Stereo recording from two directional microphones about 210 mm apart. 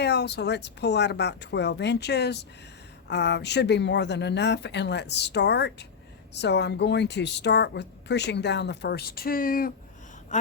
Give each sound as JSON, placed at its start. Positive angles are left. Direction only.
{"t": 0.0, "sound": "a woman's voice", "side_deg": 55}